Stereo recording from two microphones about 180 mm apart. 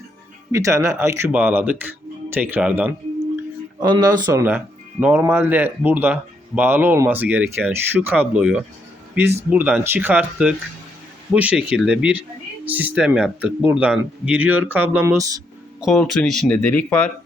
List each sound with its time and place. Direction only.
0.5 s speech: 15° right (ahead or behind)
3.8 s speech: 25° right (ahead or behind)
4.4 s speech: 10° right (ahead or behind)
15.8 s speech: centre (ahead or behind)